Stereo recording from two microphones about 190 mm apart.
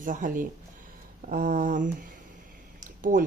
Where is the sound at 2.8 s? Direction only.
45° right (ahead or behind).